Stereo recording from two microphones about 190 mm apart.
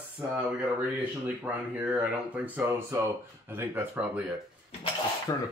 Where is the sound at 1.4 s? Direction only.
10° right (ahead or behind).